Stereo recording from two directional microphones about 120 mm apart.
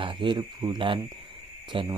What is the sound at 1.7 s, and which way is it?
Mantra, 40° right (ahead or behind).